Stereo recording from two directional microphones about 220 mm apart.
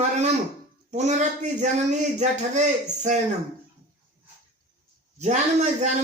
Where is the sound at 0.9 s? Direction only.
30° right (ahead or behind).